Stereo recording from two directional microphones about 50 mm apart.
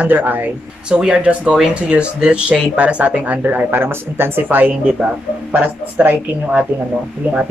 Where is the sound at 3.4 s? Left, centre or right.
Right.